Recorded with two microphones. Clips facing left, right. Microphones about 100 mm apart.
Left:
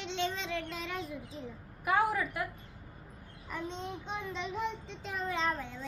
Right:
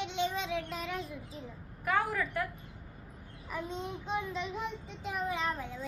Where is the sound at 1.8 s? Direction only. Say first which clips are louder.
Left 2 dB; 10° left (ahead or behind).